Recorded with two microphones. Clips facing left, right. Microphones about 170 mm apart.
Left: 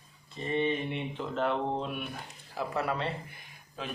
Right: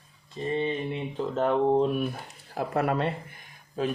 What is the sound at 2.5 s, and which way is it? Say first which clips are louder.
Speech: right 5 dB; 55° right (ahead or behind).